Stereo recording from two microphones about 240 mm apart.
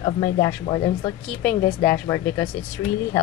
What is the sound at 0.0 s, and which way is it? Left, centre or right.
Speech, centre.